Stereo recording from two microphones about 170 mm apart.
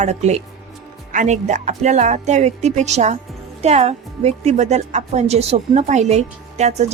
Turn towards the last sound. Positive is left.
turn(degrees=-40)  # may be behind; listen again after turning